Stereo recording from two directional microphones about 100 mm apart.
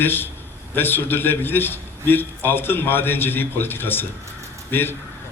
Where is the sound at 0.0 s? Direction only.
20° left (ahead or behind).